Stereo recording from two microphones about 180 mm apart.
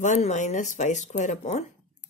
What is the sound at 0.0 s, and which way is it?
Speech, 40° left (ahead or behind).